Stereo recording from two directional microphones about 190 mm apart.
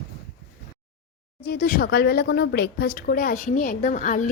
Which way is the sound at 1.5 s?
50° left (ahead or behind).